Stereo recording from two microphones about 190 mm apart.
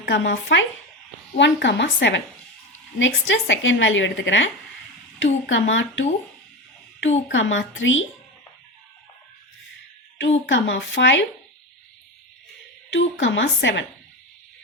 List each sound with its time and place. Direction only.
0.0 s a woman's voice: 65° left (ahead or behind)
7.3 s a woman's voice: 80° left
10.2 s a woman's voice: 70° left (ahead or behind)
12.9 s a woman's voice: 75° left (ahead or behind)